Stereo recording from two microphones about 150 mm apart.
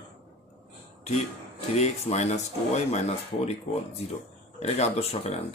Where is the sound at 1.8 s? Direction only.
50° left (ahead or behind).